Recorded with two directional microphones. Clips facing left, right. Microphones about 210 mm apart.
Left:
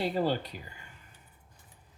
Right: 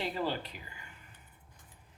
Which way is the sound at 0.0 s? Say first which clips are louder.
Left 5 dB; 40° left (ahead or behind).